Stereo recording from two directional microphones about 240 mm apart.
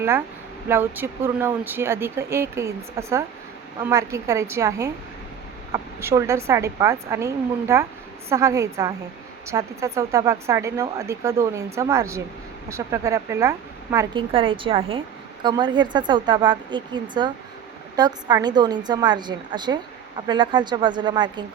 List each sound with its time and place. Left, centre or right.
0.7 s a woman's voice: centre